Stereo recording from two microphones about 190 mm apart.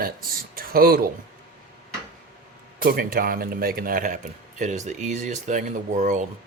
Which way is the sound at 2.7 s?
50° right (ahead or behind).